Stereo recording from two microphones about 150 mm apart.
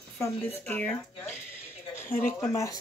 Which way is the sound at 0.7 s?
10° left (ahead or behind).